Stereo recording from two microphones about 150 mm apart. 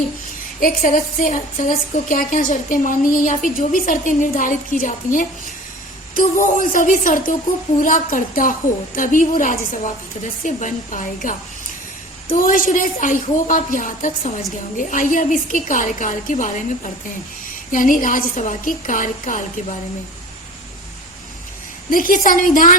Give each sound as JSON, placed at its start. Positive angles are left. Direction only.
{"t": 0.6, "sound": "a woman's voice", "side_deg": 65}
{"t": 21.8, "sound": "a woman's voice", "side_deg": 70}